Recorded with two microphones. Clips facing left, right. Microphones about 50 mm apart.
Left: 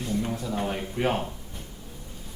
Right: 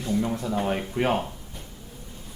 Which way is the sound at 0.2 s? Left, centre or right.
Right.